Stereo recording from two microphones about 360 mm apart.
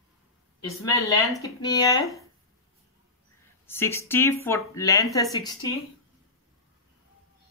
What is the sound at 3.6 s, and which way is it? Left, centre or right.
Speech, centre.